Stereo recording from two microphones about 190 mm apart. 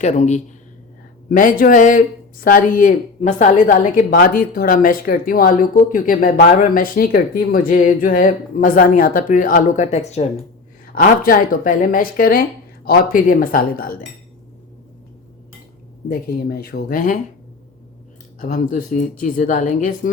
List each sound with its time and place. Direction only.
0.0 s speech: 35° left (ahead or behind)
10.9 s speech: 45° left (ahead or behind)
16.0 s speech: 50° left (ahead or behind)
18.3 s speech: 45° left (ahead or behind)